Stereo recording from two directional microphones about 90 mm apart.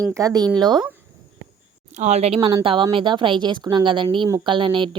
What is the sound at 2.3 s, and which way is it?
Speech, 80° right.